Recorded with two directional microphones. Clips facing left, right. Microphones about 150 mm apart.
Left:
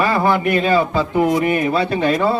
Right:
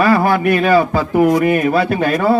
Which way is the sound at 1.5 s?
55° right (ahead or behind).